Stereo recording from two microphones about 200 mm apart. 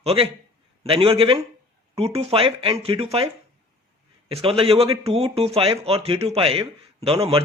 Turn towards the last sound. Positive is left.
turn(degrees=-30)  # may be behind; listen again after turning